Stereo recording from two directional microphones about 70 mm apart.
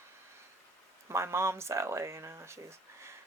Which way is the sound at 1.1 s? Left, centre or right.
Right.